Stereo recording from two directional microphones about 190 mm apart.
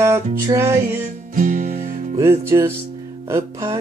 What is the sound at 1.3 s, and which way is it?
Music, 45° right (ahead or behind).